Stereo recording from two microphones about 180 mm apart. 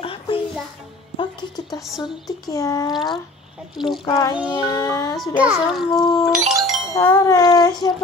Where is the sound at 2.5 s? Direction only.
20° left (ahead or behind).